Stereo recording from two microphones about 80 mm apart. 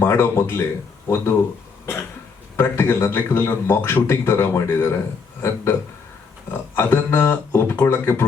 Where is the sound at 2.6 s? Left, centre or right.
Left.